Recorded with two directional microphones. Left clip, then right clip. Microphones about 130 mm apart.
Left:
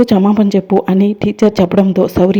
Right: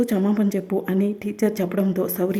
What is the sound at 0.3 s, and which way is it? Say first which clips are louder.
Speech: left 11 dB; 35° left (ahead or behind).